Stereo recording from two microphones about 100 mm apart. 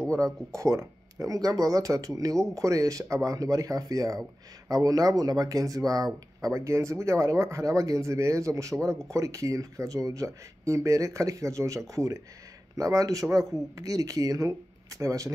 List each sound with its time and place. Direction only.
0.1 s speech: 35° right (ahead or behind)